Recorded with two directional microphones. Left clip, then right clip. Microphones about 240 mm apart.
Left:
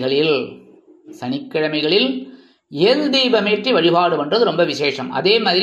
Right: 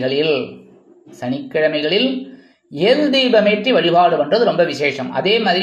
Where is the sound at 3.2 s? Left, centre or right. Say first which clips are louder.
Right 3 dB; centre.